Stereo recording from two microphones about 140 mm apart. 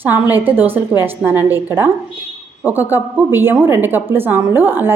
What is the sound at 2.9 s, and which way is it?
A woman's voice, 15° right (ahead or behind).